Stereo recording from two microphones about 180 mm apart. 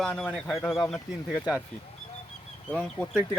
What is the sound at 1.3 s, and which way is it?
Speech, 5° right (ahead or behind).